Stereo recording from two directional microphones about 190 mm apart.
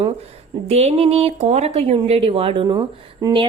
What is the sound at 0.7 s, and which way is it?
Speech, 30° right (ahead or behind).